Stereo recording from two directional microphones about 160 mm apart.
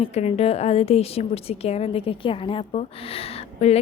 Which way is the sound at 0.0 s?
40° left (ahead or behind).